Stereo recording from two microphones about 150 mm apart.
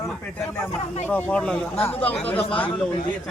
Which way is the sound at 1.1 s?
5° left (ahead or behind).